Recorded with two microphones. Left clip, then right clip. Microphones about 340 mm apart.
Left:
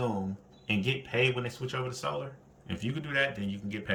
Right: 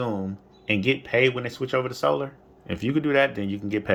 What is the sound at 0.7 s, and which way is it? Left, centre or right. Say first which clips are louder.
Speech: right 9 dB; centre.